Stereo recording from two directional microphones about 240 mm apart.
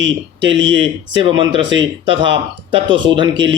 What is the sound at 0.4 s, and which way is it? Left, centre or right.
Speech, right.